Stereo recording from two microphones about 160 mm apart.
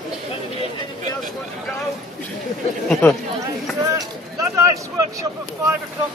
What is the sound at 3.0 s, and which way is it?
Speech, 15° left (ahead or behind).